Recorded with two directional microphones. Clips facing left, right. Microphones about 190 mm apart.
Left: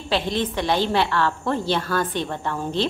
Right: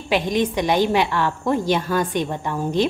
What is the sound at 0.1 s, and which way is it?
A woman's voice, 15° right (ahead or behind).